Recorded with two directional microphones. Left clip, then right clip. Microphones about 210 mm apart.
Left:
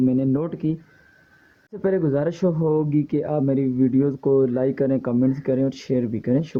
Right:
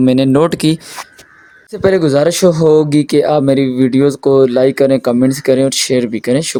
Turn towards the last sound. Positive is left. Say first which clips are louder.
# right 9 dB
turn(degrees=-30)  # may be behind; listen again after turning